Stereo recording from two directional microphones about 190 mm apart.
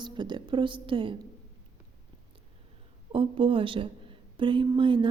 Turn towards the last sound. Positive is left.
turn(degrees=-25)  # may be behind; listen again after turning